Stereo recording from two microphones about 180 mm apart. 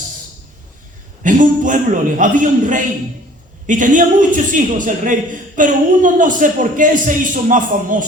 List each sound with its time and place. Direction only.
1.2 s speech: 45° right (ahead or behind)